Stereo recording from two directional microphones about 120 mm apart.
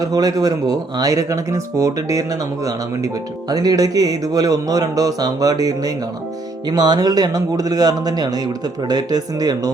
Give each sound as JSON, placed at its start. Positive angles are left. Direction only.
{"t": 0.0, "sound": "speech", "side_deg": -30}